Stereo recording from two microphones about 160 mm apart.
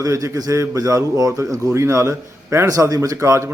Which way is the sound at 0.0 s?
20° right (ahead or behind).